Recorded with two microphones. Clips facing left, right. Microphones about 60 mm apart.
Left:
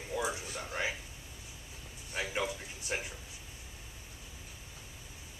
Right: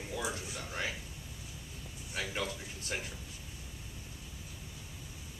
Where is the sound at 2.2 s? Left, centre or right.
Centre.